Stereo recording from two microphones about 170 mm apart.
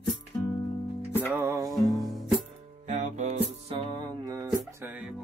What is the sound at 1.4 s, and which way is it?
Music, 15° right (ahead or behind).